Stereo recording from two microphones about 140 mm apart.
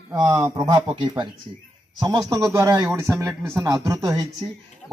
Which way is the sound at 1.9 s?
25° right (ahead or behind).